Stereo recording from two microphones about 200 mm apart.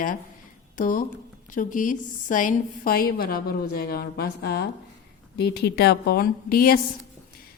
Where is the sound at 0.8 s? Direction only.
45° left (ahead or behind).